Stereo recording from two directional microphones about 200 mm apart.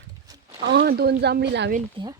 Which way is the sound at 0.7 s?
55° right (ahead or behind).